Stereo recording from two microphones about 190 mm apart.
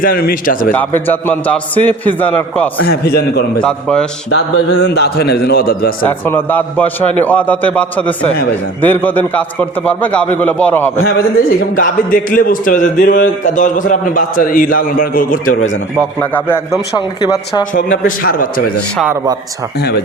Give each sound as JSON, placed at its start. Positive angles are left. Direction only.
{"t": 0.0, "sound": "a man's voice", "side_deg": 50}
{"t": 0.7, "sound": "a man's voice", "side_deg": 10}
{"t": 2.8, "sound": "a man's voice", "side_deg": 55}
{"t": 3.6, "sound": "a man's voice", "side_deg": 5}
{"t": 4.3, "sound": "a man's voice", "side_deg": 65}
{"t": 6.1, "sound": "a man's voice", "side_deg": 10}
{"t": 11.8, "sound": "a man's voice", "side_deg": 45}
{"t": 16.5, "sound": "a man's voice", "side_deg": 20}
{"t": 18.0, "sound": "a man's voice", "side_deg": 50}